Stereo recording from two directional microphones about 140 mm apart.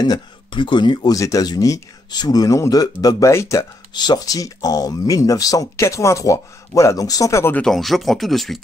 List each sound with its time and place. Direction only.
0.0 s speech: 30° left (ahead or behind)
7.6 s speech: centre (ahead or behind)